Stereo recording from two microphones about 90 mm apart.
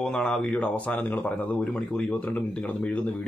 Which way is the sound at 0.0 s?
10° left (ahead or behind).